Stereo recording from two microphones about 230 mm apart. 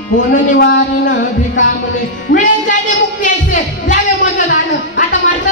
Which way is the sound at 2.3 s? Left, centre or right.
Left.